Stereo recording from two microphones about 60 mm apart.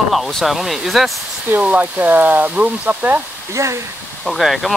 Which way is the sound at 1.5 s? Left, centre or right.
Right.